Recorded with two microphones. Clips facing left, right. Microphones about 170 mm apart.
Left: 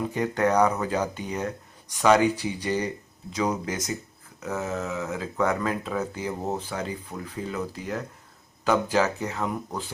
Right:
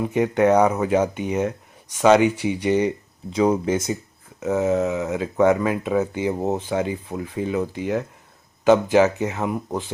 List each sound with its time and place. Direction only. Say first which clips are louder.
0.0 s speech: right 6 dB; 20° right (ahead or behind)